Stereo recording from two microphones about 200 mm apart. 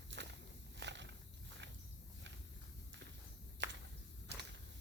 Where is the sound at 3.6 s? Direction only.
60° right (ahead or behind).